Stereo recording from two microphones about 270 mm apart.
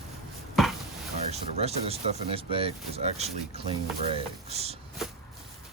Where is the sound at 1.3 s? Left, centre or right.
Right.